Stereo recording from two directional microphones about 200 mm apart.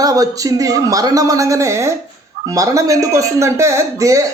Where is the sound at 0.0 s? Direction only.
20° right (ahead or behind).